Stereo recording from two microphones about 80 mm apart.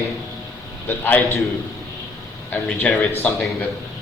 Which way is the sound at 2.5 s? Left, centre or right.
Centre.